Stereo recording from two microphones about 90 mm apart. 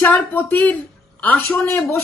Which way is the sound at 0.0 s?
20° left (ahead or behind).